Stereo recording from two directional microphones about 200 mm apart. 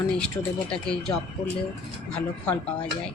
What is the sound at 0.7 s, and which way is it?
Speech, 5° left (ahead or behind).